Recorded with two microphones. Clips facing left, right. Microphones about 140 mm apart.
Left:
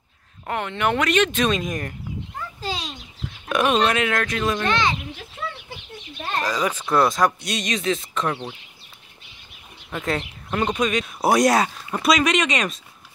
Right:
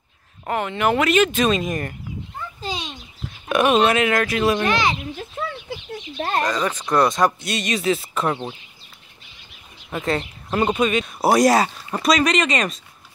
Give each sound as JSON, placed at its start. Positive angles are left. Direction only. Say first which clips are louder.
{"t": 0.5, "sound": "speech", "louder": "right 3 dB", "side_deg": -5}
{"t": 2.6, "sound": "a sound", "louder": "even", "side_deg": 0}
{"t": 3.4, "sound": "speech", "louder": "right 3 dB", "side_deg": -5}
{"t": 6.1, "sound": "a sound", "louder": "right 5 dB", "side_deg": -45}
{"t": 6.4, "sound": "speech", "louder": "right 1 dB", "side_deg": 5}
{"t": 9.8, "sound": "speech", "louder": "right 2 dB", "side_deg": 0}